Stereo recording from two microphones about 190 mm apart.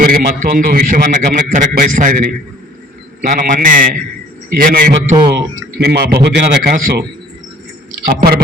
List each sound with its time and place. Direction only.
0.0 s a man's voice: 50° right (ahead or behind)
5.1 s speech: 20° right (ahead or behind)
5.8 s a man's voice: 60° right (ahead or behind)